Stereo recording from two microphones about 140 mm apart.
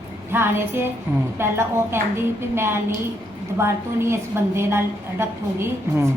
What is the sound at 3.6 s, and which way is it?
A woman's voice, 20° right (ahead or behind).